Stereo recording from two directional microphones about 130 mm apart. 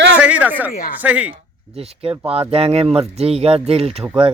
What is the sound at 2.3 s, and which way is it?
Speech, 50° right (ahead or behind).